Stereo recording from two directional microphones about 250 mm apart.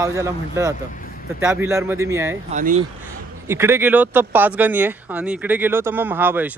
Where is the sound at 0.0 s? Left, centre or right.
Centre.